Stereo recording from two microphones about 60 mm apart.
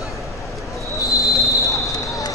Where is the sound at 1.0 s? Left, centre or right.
Left.